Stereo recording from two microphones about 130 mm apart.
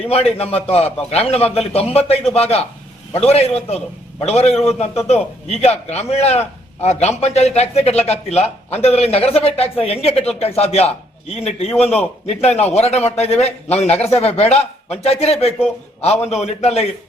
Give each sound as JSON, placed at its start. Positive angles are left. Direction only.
{"t": 0.0, "sound": "a man's voice", "side_deg": 50}